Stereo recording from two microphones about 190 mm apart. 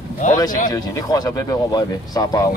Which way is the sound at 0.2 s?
40° left (ahead or behind).